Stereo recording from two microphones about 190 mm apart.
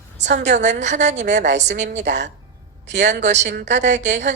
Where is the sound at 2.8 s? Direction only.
65° right (ahead or behind).